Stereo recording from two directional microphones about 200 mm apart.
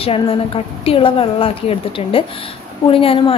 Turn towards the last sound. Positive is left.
turn(degrees=30)  # may be behind; listen again after turning